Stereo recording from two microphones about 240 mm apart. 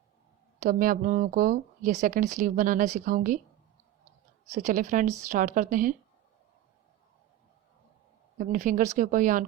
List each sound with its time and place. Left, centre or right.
0.6 s speech: right
4.5 s speech: right
8.4 s speech: right